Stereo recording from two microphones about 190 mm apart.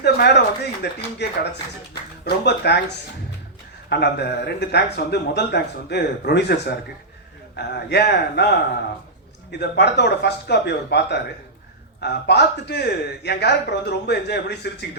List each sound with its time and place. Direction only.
0.0 s speech: 60° left (ahead or behind)
3.8 s speech: 60° left (ahead or behind)